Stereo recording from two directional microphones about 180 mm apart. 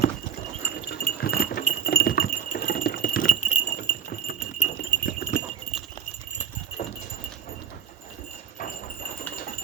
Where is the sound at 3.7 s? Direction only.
55° left (ahead or behind).